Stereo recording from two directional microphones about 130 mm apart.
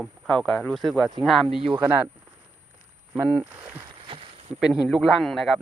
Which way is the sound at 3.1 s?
10° right (ahead or behind).